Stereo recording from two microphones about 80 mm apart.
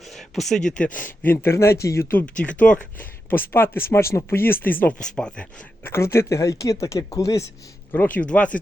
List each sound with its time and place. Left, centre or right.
0.1 s speech: centre
0.9 s speech: left
2.2 s speech: centre
5.8 s speech: left
7.9 s speech: left